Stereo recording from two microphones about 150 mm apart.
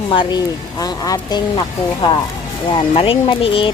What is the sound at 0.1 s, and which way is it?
Speech, 30° left (ahead or behind).